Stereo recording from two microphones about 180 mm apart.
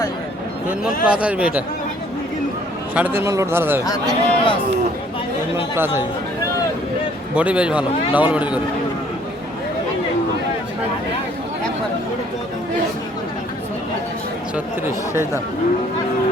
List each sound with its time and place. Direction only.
1.0 s a man's voice: 5° right (ahead or behind)
2.9 s a man's voice: 10° right (ahead or behind)
3.8 s a man's voice: 20° left (ahead or behind)
5.7 s a man's voice: 15° right (ahead or behind)
7.3 s a man's voice: 5° right (ahead or behind)
14.5 s a man's voice: 15° right (ahead or behind)